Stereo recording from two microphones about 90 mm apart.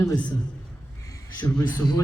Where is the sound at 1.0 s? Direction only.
35° left (ahead or behind).